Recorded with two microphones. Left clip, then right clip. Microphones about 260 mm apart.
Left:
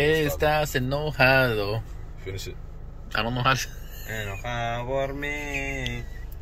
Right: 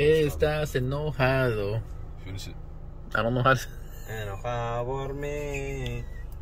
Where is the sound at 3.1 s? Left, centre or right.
Right.